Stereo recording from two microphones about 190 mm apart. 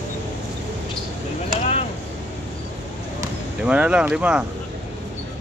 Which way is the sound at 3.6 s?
5° right (ahead or behind).